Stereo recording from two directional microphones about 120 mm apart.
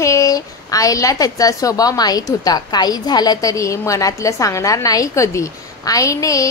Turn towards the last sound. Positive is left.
turn(degrees=30)  # may be behind; listen again after turning